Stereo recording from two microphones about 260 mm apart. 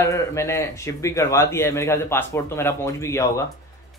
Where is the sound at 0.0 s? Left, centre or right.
Centre.